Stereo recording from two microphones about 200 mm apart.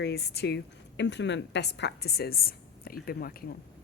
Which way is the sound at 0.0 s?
55° left (ahead or behind).